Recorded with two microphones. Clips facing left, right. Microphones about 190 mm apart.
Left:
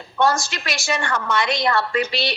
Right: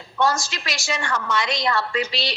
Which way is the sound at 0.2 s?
55° left (ahead or behind).